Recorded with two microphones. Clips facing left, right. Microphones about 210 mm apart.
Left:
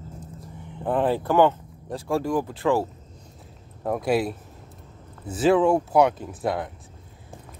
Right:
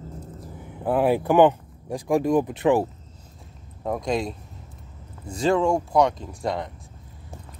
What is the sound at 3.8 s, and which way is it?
Speech, 5° left (ahead or behind).